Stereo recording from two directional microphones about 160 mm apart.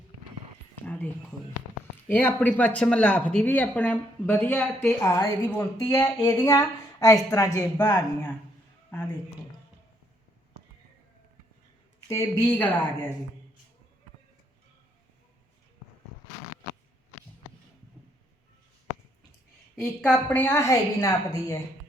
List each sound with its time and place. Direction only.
2.0 s a woman's voice: 10° left (ahead or behind)
5.0 s a woman's voice: 15° left (ahead or behind)
12.0 s a woman's voice: 20° left (ahead or behind)
19.7 s a woman's voice: 5° left (ahead or behind); by 21.6 s 20° left (ahead or behind)